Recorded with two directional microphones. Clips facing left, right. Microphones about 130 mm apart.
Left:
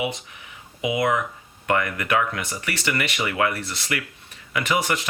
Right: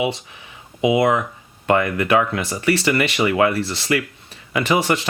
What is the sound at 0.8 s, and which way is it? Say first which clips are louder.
Speech: right 6 dB; 25° right (ahead or behind).